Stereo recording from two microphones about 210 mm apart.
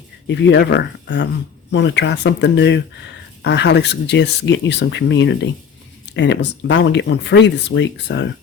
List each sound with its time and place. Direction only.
0.3 s speech: 55° left (ahead or behind)